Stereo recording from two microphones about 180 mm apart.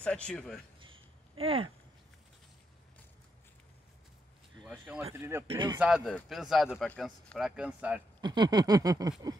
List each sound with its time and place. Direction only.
0.0 s speech: 5° left (ahead or behind)
1.4 s speech: 30° right (ahead or behind)
4.6 s speech: 5° right (ahead or behind)
5.5 s a sound: 25° right (ahead or behind)
5.8 s speech: 5° right (ahead or behind)
8.2 s a sound: 25° right (ahead or behind)